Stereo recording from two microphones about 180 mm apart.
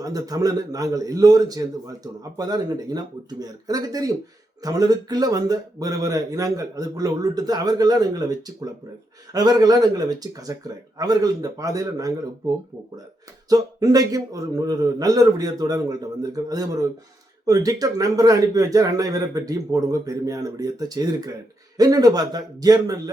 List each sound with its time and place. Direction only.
0.0 s speech: 20° right (ahead or behind)
13.5 s speech: 20° right (ahead or behind)